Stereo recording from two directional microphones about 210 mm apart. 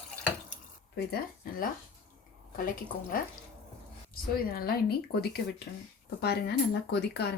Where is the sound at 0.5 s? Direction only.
45° left (ahead or behind).